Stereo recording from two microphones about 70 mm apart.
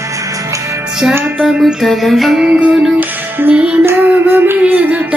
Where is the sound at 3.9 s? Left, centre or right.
Right.